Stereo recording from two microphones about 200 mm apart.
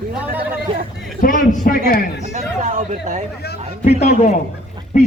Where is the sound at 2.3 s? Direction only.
40° right (ahead or behind).